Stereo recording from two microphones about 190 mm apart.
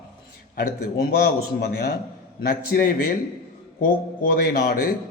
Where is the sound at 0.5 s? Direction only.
50° left (ahead or behind).